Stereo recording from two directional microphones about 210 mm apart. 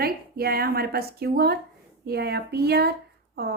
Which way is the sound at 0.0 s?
45° right (ahead or behind).